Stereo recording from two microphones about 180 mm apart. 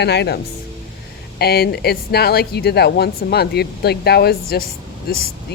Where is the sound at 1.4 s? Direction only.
60° left (ahead or behind).